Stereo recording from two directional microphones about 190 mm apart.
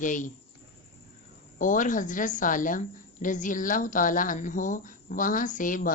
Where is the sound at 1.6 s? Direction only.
45° left (ahead or behind).